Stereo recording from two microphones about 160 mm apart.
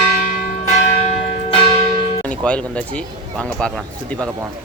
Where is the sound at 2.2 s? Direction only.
10° left (ahead or behind).